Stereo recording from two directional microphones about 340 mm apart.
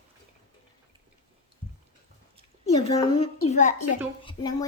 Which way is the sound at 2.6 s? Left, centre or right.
Centre.